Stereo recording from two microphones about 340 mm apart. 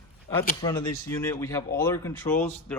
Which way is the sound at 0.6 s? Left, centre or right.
Centre.